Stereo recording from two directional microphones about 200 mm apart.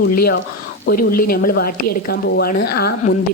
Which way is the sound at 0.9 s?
45° left (ahead or behind).